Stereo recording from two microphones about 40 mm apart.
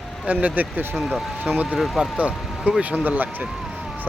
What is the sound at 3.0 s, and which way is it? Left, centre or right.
Speech, right.